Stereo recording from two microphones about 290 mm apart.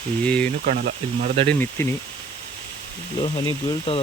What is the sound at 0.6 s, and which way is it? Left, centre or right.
Speech, right.